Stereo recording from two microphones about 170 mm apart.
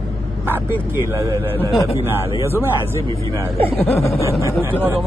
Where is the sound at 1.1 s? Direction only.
20° right (ahead or behind).